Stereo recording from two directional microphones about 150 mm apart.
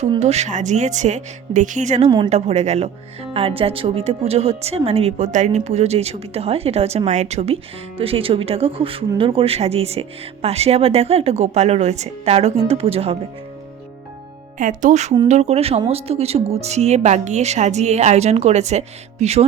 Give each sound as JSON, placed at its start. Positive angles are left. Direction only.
{"t": 0.2, "sound": "speech", "side_deg": -45}
{"t": 2.0, "sound": "speech", "side_deg": -30}
{"t": 2.3, "sound": "a woman's voice", "side_deg": -50}
{"t": 14.6, "sound": "speech", "side_deg": -60}